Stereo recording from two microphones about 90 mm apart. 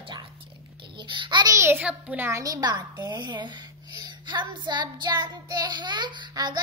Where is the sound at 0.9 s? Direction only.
65° right (ahead or behind).